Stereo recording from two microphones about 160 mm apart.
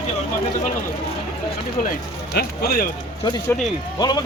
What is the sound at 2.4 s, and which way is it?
Speech, 80° left.